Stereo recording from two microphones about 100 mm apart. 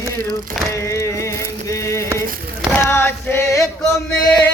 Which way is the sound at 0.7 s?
30° left (ahead or behind).